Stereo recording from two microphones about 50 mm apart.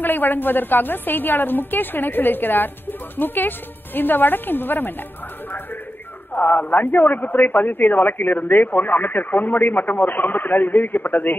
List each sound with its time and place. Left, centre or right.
0.0 s a man's voice: left
6.3 s a man's voice: left